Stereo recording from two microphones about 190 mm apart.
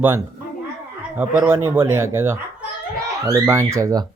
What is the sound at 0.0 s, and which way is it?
Speech, 15° right (ahead or behind).